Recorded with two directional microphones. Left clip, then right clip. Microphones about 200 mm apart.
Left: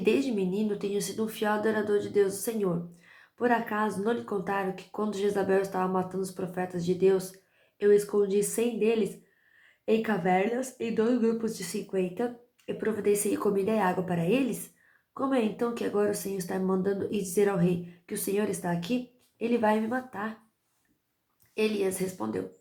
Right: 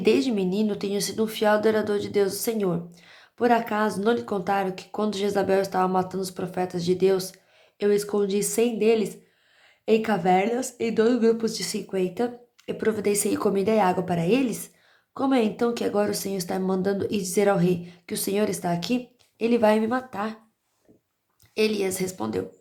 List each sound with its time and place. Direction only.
0.0 s speech: 25° right (ahead or behind)
21.5 s speech: 25° right (ahead or behind)